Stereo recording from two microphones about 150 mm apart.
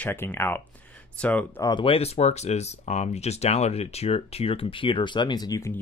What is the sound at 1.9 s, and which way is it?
Speech, 40° left (ahead or behind).